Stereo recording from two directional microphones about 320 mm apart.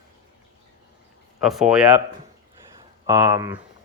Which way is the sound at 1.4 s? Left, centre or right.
Centre.